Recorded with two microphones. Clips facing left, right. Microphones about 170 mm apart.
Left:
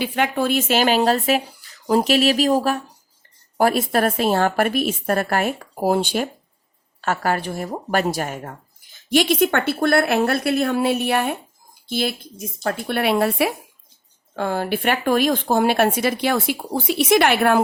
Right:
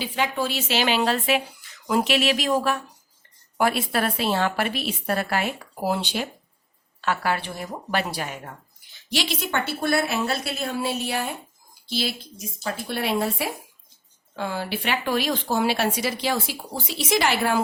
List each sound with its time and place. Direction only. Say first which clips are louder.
0.0 s a woman's voice: left 5 dB; 55° left (ahead or behind)
14.3 s a woman's voice: left 6 dB; 50° left (ahead or behind)